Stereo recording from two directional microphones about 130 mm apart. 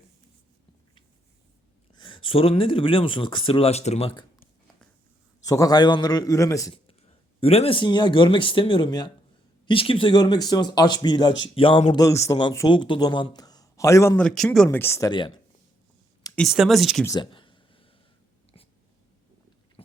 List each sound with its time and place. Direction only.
2.0 s speech: 40° left (ahead or behind); by 4.1 s 55° left (ahead or behind)
5.4 s a man's voice: 30° left (ahead or behind)
6.8 s speech: 50° left (ahead or behind); by 9.1 s 35° left (ahead or behind)
9.6 s speech: 45° left (ahead or behind)
11.9 s a man's voice: 25° left (ahead or behind)
12.6 s speech: 40° left (ahead or behind); by 14.2 s 20° left (ahead or behind)
14.2 s speech: 5° left (ahead or behind)
14.7 s a man's voice: 20° left (ahead or behind)
16.5 s speech: centre (ahead or behind)
17.1 s a sound: 35° left (ahead or behind)